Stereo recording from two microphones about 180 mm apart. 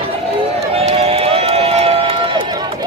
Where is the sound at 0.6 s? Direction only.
35° right (ahead or behind).